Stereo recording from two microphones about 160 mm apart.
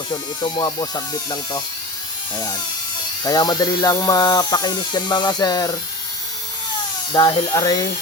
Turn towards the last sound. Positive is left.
turn(degrees=25)  # may be behind; listen again after turning